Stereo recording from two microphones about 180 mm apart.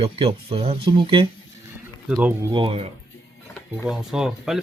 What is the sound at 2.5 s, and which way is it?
Speech, 30° right (ahead or behind).